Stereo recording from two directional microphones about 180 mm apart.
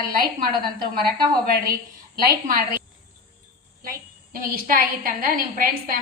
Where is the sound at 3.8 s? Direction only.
50° right (ahead or behind).